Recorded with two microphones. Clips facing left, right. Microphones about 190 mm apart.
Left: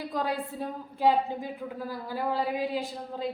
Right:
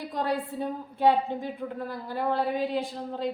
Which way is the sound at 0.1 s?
Centre (ahead or behind).